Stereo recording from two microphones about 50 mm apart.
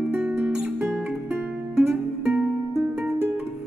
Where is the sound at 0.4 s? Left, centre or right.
Right.